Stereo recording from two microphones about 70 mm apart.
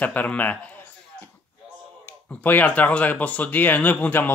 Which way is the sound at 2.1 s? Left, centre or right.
Left.